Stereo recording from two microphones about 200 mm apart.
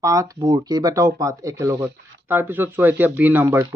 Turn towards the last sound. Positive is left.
turn(degrees=-10)  # may be behind; listen again after turning